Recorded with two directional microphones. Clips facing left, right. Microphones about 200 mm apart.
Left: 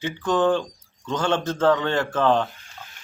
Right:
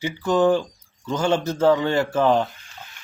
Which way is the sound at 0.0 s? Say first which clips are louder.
Right 2 dB; 10° right (ahead or behind).